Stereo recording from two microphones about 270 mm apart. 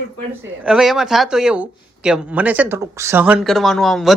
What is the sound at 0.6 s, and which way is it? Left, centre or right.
Speech, centre.